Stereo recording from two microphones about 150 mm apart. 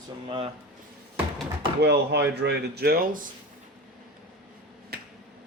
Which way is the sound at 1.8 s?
90° right.